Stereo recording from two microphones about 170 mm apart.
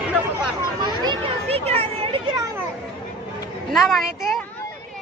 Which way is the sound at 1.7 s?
35° right (ahead or behind).